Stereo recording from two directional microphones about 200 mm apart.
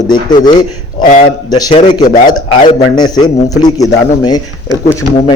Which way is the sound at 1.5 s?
20° left (ahead or behind).